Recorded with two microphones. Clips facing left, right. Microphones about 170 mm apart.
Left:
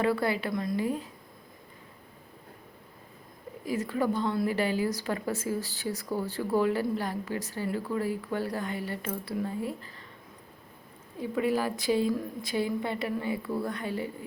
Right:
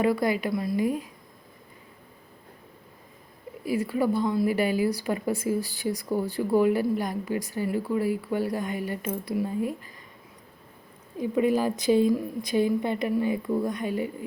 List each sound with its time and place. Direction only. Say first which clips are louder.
0.0 s a woman's voice: right 3 dB; 15° right (ahead or behind)
3.6 s a woman's voice: right 4 dB; 10° right (ahead or behind)
11.2 s a woman's voice: right 4 dB; 20° right (ahead or behind)